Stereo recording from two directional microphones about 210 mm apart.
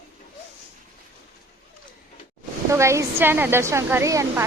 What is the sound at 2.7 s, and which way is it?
A woman's voice, 15° right (ahead or behind).